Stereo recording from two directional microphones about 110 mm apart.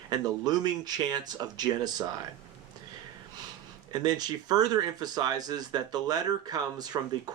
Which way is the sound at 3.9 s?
35° right (ahead or behind).